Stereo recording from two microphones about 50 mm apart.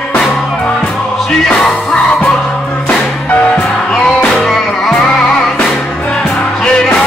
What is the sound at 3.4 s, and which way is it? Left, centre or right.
Music, centre.